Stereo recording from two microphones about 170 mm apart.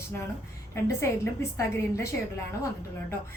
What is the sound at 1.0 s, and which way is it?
A woman's voice, 15° left (ahead or behind).